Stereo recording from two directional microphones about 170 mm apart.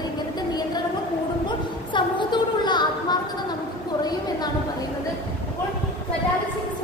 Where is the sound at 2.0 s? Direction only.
25° left (ahead or behind).